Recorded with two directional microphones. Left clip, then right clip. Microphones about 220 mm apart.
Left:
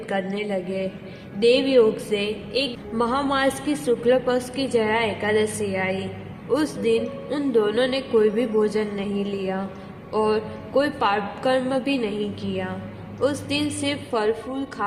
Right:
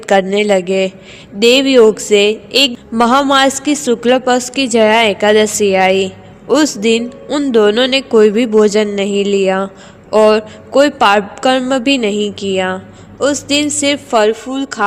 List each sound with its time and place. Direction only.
0.0 s a woman's voice: 45° right (ahead or behind)